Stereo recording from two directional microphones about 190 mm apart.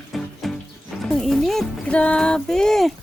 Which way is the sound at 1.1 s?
Centre (ahead or behind).